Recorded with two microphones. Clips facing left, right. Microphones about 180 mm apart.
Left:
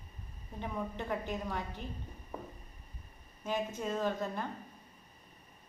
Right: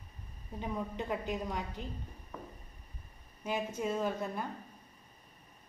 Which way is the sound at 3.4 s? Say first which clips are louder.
Right 1 dB; 10° right (ahead or behind).